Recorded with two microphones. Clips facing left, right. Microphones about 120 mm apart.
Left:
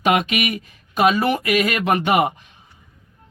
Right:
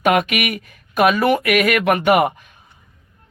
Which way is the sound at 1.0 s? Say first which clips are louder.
Right 2 dB; 25° left (ahead or behind).